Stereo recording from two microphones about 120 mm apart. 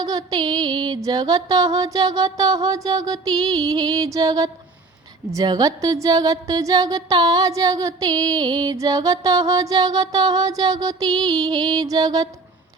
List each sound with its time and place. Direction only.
0.0 s speech: 30° right (ahead or behind)